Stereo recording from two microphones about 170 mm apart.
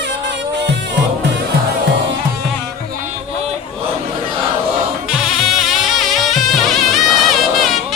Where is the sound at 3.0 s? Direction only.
40° right (ahead or behind).